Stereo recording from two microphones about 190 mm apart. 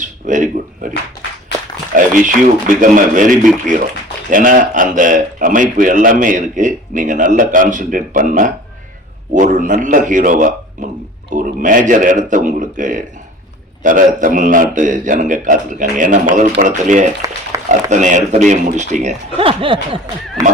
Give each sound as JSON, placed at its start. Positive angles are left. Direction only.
{"t": 0.0, "sound": "speech", "side_deg": -40}
{"t": 2.0, "sound": "a man's voice", "side_deg": -45}
{"t": 17.5, "sound": "a sound", "side_deg": -15}
{"t": 17.9, "sound": "speech", "side_deg": -40}